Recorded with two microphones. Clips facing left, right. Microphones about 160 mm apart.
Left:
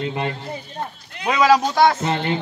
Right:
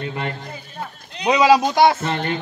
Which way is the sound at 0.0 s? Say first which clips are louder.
Left 2 dB; 20° left (ahead or behind).